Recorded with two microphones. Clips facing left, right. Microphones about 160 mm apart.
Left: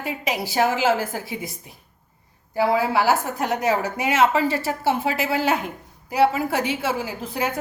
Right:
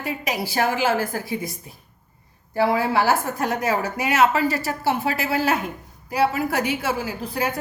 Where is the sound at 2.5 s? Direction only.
15° left (ahead or behind).